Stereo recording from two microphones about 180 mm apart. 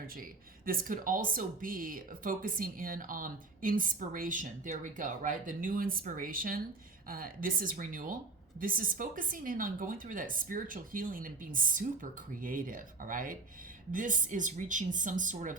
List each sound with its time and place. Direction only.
0.6 s speech: 50° right (ahead or behind)